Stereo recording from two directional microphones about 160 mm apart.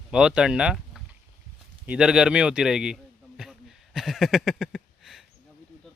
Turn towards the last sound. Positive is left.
turn(degrees=0)  # may be behind; listen again after turning